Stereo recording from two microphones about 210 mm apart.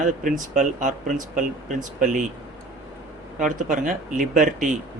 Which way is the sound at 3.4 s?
40° right (ahead or behind).